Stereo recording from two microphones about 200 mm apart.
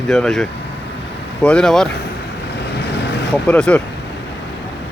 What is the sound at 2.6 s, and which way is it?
Vehicle, 55° left (ahead or behind).